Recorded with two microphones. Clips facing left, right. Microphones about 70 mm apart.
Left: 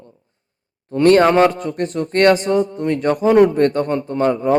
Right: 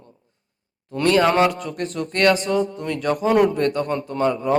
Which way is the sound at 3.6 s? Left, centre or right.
Left.